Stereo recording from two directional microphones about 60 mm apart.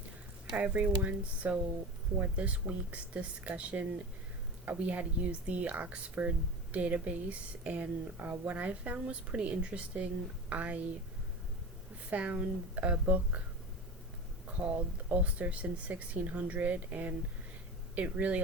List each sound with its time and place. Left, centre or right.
0.5 s speech: right
12.1 s speech: right
14.6 s speech: right